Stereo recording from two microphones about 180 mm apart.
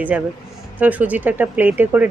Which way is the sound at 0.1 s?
5° right (ahead or behind).